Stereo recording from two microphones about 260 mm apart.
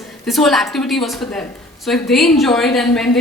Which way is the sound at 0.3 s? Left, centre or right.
Centre.